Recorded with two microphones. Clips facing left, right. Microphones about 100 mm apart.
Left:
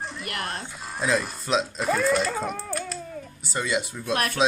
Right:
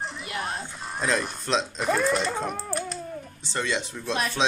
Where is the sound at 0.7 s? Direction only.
Centre (ahead or behind).